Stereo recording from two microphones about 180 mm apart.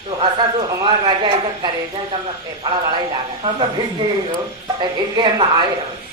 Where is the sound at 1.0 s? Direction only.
25° right (ahead or behind).